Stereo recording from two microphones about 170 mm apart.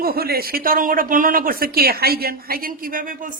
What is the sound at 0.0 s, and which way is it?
A woman's voice, 65° right (ahead or behind).